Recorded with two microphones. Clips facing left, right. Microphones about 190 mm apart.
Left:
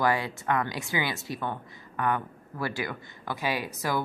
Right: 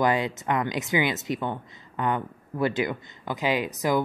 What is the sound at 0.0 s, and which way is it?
Speech, 20° right (ahead or behind).